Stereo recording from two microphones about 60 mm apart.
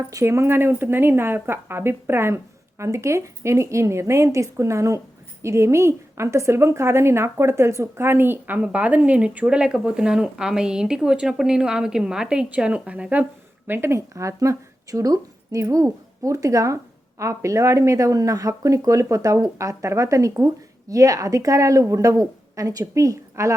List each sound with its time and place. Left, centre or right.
0.3 s a woman's voice: right
13.7 s speech: right
13.9 s a woman's voice: right
23.3 s a woman's voice: right